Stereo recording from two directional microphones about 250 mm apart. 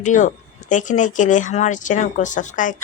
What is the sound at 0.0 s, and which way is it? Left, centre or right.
Speech, left.